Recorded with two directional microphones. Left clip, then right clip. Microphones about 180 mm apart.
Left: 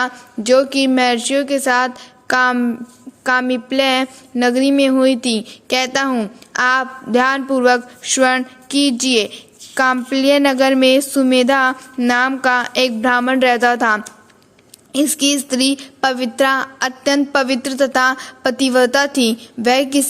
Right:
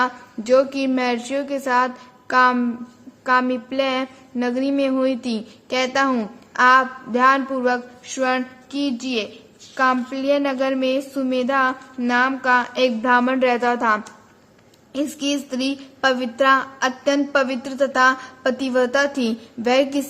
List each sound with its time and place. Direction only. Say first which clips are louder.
0.0 s a woman's voice: left 2 dB; 25° left (ahead or behind)